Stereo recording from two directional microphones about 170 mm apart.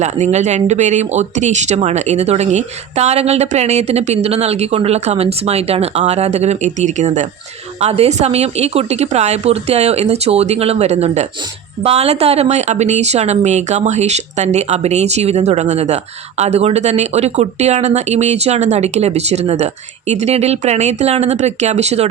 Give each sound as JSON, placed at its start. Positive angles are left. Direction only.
{"t": 0.0, "sound": "speech", "side_deg": -40}